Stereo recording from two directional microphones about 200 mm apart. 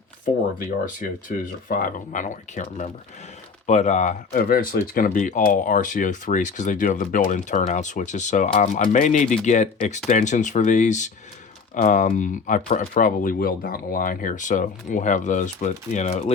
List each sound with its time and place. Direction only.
1.6 s speech: 40° left (ahead or behind)
4.3 s speech: 45° left (ahead or behind)